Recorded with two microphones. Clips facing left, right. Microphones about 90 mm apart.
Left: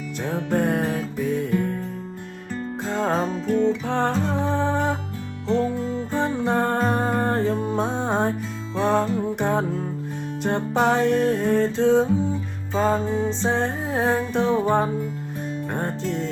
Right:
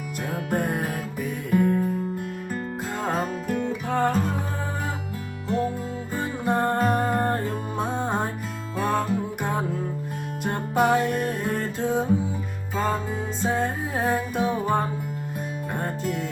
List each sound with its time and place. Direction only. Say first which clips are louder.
0.3 s music: left 4 dB; 5° right (ahead or behind)
2.9 s music: left 4 dB; 5° right (ahead or behind)
4.4 s music: left 9 dB; 25° left (ahead or behind)
5.5 s music: left 4 dB; 10° right (ahead or behind)